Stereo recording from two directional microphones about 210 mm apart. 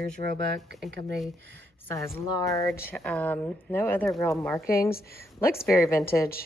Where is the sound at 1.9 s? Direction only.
15° left (ahead or behind).